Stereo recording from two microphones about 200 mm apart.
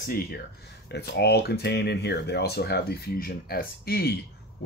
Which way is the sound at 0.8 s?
55° left (ahead or behind).